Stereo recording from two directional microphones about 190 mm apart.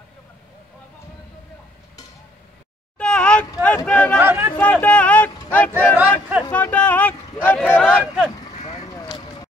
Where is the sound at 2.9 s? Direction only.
5° left (ahead or behind).